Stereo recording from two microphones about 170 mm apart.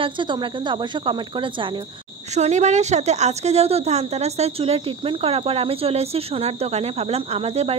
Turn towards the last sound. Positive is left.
turn(degrees=-35)  # may be behind; listen again after turning